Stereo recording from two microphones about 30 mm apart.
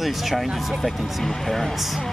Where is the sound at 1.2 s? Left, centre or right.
Centre.